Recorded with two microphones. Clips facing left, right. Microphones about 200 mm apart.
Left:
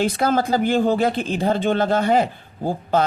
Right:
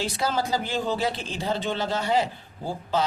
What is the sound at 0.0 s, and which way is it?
Speech, 55° left (ahead or behind).